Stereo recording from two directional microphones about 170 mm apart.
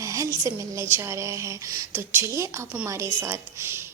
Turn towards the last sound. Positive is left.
turn(degrees=-15)  # may be behind; listen again after turning